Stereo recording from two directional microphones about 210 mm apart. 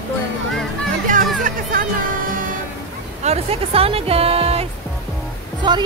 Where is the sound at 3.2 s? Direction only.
30° right (ahead or behind).